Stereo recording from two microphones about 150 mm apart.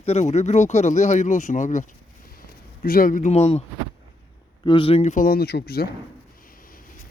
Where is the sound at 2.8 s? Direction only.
70° left (ahead or behind); by 3.6 s 45° left (ahead or behind).